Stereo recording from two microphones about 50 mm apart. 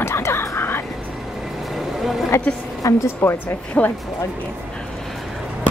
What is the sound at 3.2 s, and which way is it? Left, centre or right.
Speech, left.